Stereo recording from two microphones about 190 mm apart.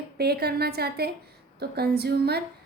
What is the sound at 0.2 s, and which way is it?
A woman's voice, 55° right (ahead or behind).